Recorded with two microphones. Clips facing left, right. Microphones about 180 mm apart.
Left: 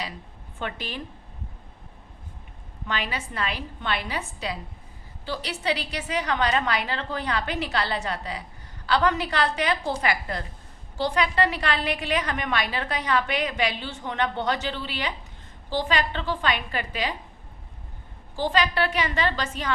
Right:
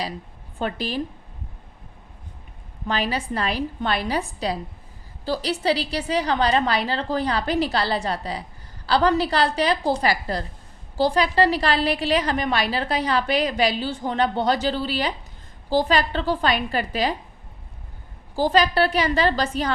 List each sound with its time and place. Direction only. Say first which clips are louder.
0.6 s a woman's voice: right 7 dB; 35° right (ahead or behind)
2.8 s a woman's voice: right 6 dB; 35° right (ahead or behind)
18.3 s a woman's voice: right 5 dB; 40° right (ahead or behind)